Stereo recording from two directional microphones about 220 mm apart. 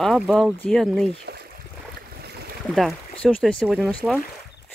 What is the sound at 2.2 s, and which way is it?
Boat, 45° right (ahead or behind).